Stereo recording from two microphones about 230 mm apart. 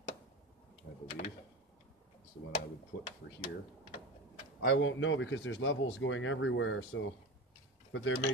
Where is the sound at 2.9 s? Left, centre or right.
Left.